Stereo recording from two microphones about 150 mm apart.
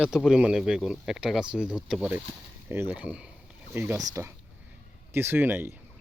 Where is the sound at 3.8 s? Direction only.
20° right (ahead or behind).